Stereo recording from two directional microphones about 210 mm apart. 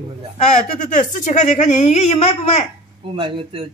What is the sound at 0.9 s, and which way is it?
A woman's voice, 35° left (ahead or behind).